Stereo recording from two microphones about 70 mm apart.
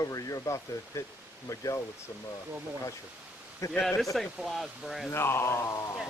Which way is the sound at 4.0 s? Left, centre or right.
Centre.